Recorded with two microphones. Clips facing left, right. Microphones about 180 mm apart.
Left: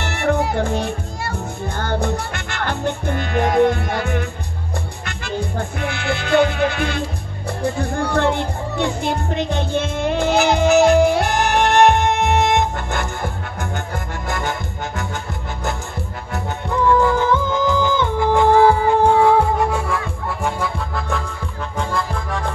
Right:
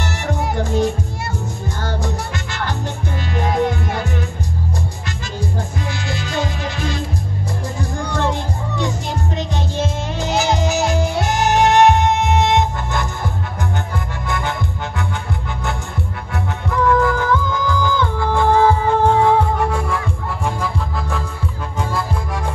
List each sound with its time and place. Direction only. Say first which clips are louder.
0.0 s music: left 4 dB; 60° left (ahead or behind)
17.0 s music: left 1 dB; 25° left (ahead or behind); by 19.8 s 10° left (ahead or behind)
20.4 s music: even; centre (ahead or behind)